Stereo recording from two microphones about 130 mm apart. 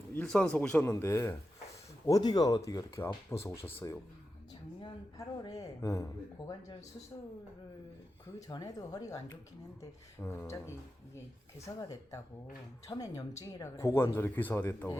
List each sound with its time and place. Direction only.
0.1 s a man's voice: 10° left (ahead or behind)
0.8 s speech: 20° left (ahead or behind)
5.1 s speech: 25° left (ahead or behind)
8.4 s speech: 30° left (ahead or behind)